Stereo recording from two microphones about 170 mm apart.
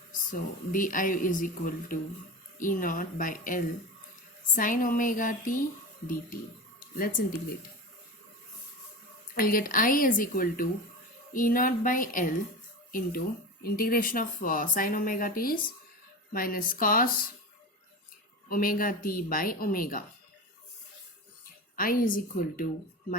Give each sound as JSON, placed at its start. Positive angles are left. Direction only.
{"t": 0.1, "sound": "speech", "side_deg": 50}
{"t": 9.3, "sound": "speech", "side_deg": 55}
{"t": 18.4, "sound": "speech", "side_deg": 55}
{"t": 21.8, "sound": "speech", "side_deg": 55}